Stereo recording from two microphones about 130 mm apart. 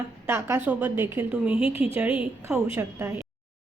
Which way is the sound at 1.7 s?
45° left (ahead or behind).